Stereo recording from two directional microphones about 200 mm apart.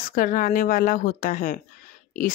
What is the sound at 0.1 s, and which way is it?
Speech, 45° left (ahead or behind).